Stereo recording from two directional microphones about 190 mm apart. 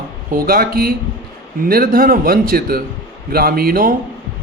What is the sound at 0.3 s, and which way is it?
A man's voice, 50° right (ahead or behind).